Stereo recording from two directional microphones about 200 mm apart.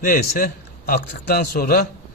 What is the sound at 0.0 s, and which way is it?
Speech, 45° left (ahead or behind).